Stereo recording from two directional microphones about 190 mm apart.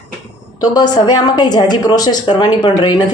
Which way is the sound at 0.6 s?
20° left (ahead or behind).